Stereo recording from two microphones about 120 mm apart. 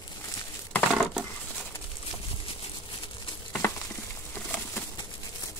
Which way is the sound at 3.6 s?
20° left (ahead or behind).